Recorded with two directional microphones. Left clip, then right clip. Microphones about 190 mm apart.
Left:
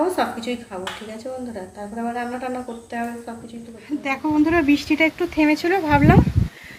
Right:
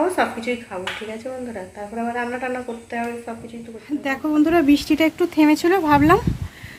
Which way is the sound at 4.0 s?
20° right (ahead or behind).